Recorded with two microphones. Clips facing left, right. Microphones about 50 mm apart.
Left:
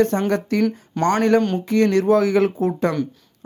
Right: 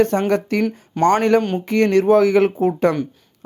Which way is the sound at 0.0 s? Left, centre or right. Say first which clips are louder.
Right 2 dB; right.